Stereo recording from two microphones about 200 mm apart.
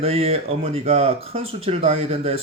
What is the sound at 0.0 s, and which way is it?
A man's voice, 30° right (ahead or behind).